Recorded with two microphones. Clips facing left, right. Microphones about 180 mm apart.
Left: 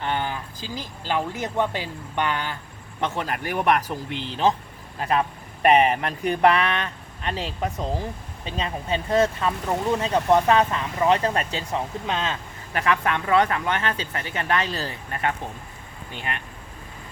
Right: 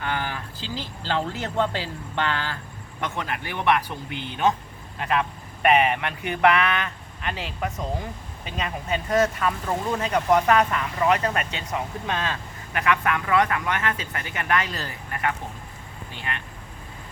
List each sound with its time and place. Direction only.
0.0 s speech: 25° left (ahead or behind)
3.0 s speech: 35° left (ahead or behind)
12.7 s speech: 35° left (ahead or behind)